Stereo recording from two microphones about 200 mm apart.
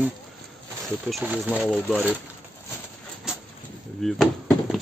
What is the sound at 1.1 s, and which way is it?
Speech, 5° right (ahead or behind).